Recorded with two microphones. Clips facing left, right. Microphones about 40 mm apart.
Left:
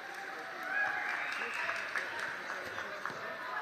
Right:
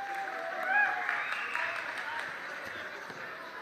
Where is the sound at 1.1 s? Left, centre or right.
Right.